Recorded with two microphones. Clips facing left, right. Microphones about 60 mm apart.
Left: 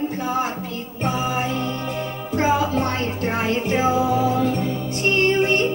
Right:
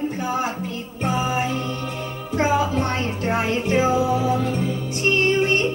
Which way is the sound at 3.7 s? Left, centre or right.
Centre.